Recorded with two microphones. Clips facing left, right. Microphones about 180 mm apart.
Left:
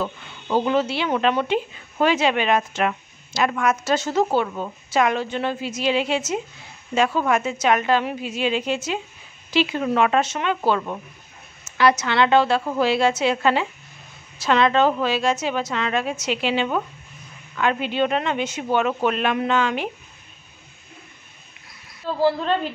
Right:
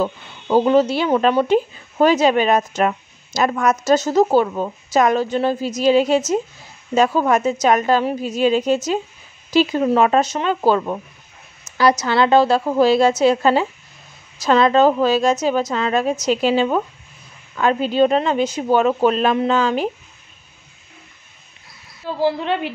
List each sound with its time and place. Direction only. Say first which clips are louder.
0.0 s speech: right 6 dB; 40° right (ahead or behind)
22.2 s a woman's voice: right 1 dB; 15° right (ahead or behind)